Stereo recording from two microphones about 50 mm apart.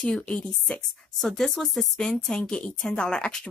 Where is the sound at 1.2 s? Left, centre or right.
Centre.